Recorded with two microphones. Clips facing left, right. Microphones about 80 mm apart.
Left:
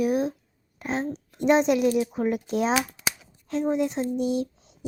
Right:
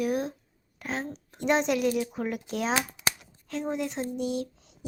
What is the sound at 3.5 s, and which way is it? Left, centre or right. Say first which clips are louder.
Speech: left 6 dB; left.